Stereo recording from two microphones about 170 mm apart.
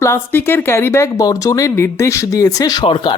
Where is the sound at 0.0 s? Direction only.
15° left (ahead or behind).